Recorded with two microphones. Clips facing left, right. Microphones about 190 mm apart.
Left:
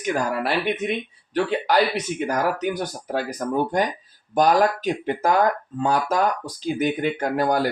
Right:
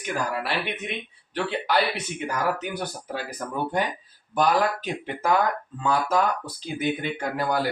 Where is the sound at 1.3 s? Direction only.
45° left (ahead or behind).